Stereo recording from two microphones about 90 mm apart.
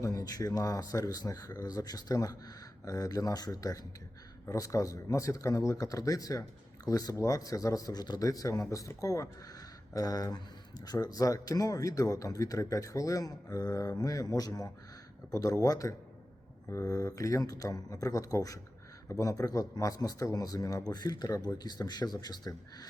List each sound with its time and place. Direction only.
0.0 s speech: 40° left (ahead or behind)